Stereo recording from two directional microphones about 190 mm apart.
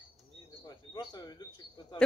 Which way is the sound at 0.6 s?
20° left (ahead or behind).